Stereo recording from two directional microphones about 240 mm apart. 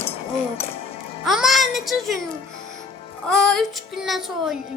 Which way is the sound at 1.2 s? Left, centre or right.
Centre.